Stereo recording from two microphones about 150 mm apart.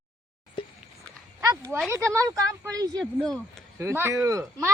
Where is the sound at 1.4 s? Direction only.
25° right (ahead or behind).